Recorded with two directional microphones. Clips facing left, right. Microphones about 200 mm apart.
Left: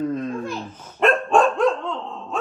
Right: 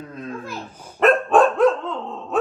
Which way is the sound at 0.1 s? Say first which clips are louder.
Left 6 dB; centre (ahead or behind).